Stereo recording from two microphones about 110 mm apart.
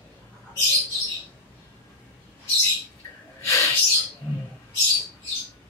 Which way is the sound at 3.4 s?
30° left (ahead or behind).